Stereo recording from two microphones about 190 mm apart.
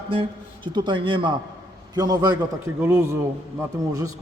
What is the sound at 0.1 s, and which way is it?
A man's voice, 25° right (ahead or behind).